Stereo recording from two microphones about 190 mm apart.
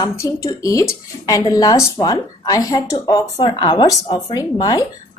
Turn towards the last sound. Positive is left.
turn(degrees=20)  # may be behind; listen again after turning